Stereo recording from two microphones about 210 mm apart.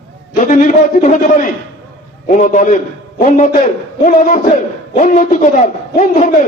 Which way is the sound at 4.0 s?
35° left (ahead or behind).